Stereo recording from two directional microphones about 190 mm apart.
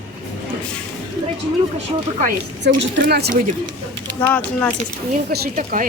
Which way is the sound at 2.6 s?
60° right (ahead or behind).